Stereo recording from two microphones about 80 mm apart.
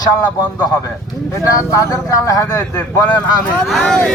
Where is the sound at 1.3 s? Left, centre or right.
Left.